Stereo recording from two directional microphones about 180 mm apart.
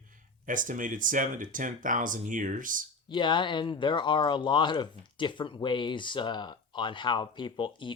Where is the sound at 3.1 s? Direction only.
25° left (ahead or behind).